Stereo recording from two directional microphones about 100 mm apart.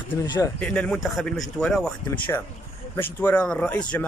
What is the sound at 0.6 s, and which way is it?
Speech, 10° left (ahead or behind).